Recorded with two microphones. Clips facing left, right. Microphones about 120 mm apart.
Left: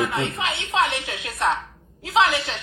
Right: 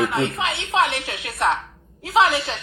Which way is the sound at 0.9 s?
20° left (ahead or behind).